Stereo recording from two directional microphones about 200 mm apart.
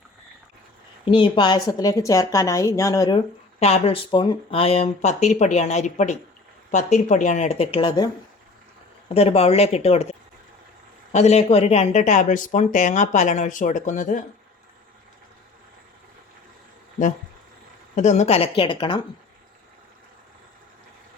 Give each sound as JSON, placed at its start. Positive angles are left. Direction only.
{"t": 1.0, "sound": "a woman's voice", "side_deg": 25}
{"t": 3.6, "sound": "speech", "side_deg": 30}
{"t": 9.1, "sound": "speech", "side_deg": 30}
{"t": 17.9, "sound": "a woman's voice", "side_deg": 35}